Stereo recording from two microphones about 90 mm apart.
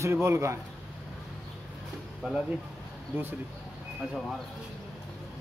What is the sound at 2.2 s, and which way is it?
Speech, 10° right (ahead or behind).